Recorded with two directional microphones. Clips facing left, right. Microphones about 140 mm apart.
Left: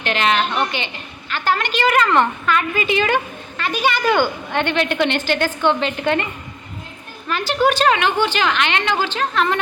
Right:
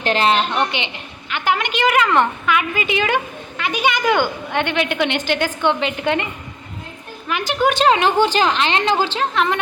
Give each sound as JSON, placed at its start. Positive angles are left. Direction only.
{"t": 0.0, "sound": "a woman's voice", "side_deg": -35}
{"t": 0.7, "sound": "a woman's voice", "side_deg": -20}
{"t": 7.3, "sound": "a woman's voice", "side_deg": -15}
{"t": 7.9, "sound": "a woman's voice", "side_deg": -40}